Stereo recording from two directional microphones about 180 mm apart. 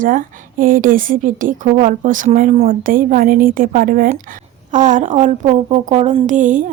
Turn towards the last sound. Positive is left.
turn(degrees=-45)  # may be behind; listen again after turning